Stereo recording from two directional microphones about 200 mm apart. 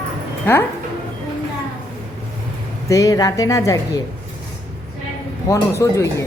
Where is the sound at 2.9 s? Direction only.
15° left (ahead or behind).